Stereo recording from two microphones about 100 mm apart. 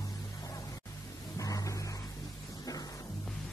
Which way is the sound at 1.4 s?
35° left (ahead or behind).